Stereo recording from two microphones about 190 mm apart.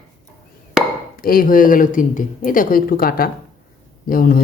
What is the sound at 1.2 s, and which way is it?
Speech, 50° left (ahead or behind).